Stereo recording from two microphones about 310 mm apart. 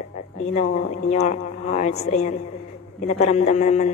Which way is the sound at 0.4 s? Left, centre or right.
Left.